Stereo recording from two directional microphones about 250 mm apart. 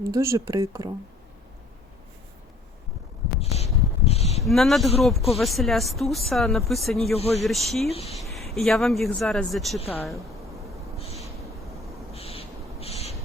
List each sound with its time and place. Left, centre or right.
0.1 s speech: centre
3.4 s a sound: left
4.4 s speech: centre
7.0 s speech: left
7.4 s speech: centre
7.9 s speech: left
8.1 s speech: centre
10.9 s a sound: left
12.1 s owl: left